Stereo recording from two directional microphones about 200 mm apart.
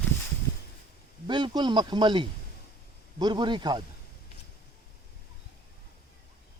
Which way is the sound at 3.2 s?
20° right (ahead or behind).